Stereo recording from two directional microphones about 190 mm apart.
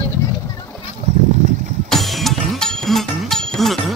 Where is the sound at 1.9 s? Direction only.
Centre (ahead or behind).